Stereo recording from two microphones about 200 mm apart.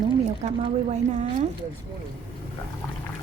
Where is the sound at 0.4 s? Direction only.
35° right (ahead or behind).